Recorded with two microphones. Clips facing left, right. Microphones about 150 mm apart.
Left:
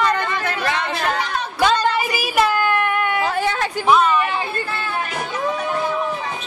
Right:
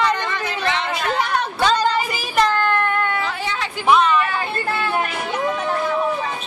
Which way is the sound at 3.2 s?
45° left (ahead or behind).